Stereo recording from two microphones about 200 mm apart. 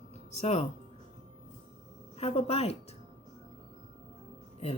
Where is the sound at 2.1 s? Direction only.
30° left (ahead or behind).